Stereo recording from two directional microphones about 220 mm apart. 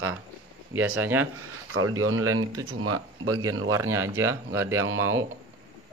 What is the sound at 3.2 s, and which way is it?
Speech, 15° right (ahead or behind).